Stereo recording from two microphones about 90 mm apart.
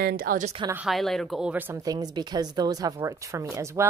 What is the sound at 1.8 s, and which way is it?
A woman's voice, 50° right (ahead or behind).